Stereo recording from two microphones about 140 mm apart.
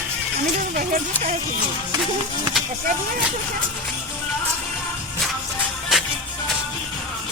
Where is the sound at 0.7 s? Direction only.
85° right.